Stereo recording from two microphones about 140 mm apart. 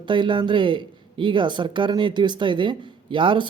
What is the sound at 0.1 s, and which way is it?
Speech, 35° right (ahead or behind).